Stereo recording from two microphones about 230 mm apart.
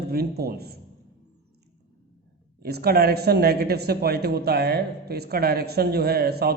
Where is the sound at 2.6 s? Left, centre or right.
Right.